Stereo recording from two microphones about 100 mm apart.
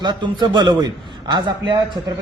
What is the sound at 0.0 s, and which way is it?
A man's voice, 50° right (ahead or behind).